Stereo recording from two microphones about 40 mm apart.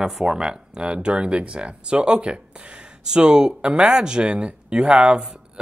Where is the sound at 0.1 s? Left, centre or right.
Centre.